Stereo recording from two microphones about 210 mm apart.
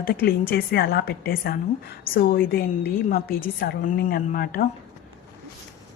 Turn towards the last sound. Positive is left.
turn(degrees=45)  # may be behind; listen again after turning